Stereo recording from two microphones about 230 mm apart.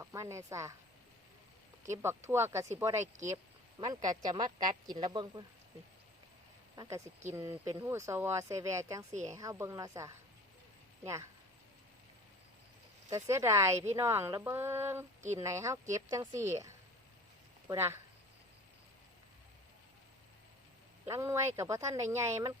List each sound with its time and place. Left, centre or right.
0.0 s a woman's voice: centre
1.9 s a woman's voice: centre
6.7 s a woman's voice: centre
13.1 s a woman's voice: centre
17.7 s a woman's voice: centre
21.0 s a woman's voice: centre